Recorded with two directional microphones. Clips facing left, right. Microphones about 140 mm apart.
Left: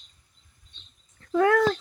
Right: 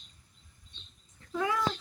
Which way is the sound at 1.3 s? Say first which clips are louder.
Left 10 dB; 75° left (ahead or behind).